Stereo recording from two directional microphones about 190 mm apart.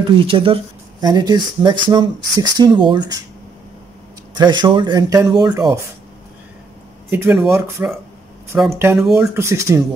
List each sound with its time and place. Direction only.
0.0 s speech: 30° right (ahead or behind)
4.4 s speech: 25° right (ahead or behind)
7.1 s speech: 10° right (ahead or behind)
8.7 s speech: 10° right (ahead or behind)
9.0 s speech: centre (ahead or behind)
9.3 s speech: 15° right (ahead or behind)